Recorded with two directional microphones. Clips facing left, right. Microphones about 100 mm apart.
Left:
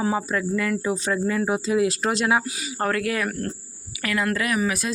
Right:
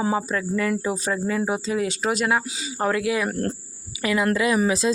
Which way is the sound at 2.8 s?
15° right (ahead or behind).